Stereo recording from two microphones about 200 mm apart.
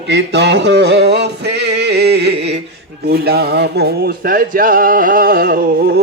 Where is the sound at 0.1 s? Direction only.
60° right (ahead or behind).